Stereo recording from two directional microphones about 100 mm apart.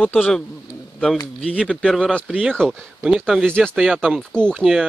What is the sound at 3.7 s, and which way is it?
Speech, centre (ahead or behind).